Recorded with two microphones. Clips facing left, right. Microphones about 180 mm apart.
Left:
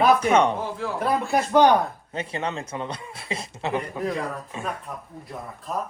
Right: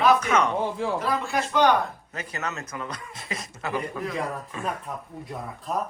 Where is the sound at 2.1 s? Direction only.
30° left (ahead or behind).